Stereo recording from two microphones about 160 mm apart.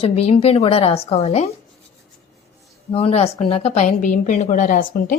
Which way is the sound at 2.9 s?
40° left (ahead or behind).